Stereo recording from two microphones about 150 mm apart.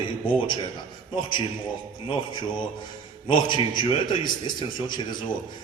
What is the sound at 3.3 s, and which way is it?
A man's voice, 30° left (ahead or behind).